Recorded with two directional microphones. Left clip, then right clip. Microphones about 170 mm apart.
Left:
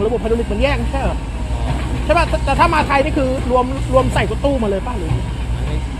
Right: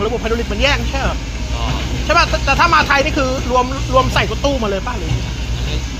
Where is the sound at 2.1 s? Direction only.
30° left (ahead or behind).